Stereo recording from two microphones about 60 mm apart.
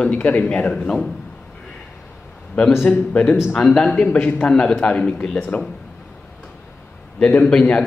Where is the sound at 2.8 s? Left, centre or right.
Centre.